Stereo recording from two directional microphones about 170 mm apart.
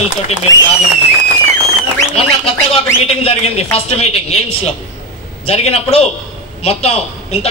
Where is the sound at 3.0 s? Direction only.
40° left (ahead or behind).